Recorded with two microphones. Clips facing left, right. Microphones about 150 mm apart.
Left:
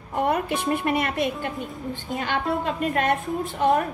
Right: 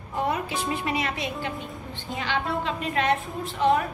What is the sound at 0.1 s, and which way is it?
A woman's voice, 60° left (ahead or behind).